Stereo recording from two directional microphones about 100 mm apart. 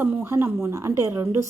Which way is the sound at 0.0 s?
25° right (ahead or behind).